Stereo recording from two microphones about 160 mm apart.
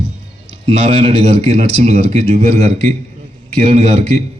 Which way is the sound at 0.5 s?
40° right (ahead or behind).